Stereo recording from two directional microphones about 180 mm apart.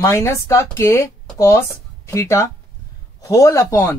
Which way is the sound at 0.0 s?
15° left (ahead or behind).